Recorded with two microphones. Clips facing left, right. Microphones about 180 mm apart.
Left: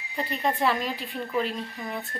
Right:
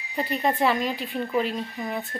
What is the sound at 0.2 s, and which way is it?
Speech, 5° right (ahead or behind).